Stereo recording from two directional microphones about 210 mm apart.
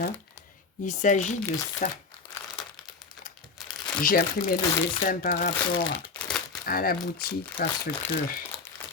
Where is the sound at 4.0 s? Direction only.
45° left (ahead or behind).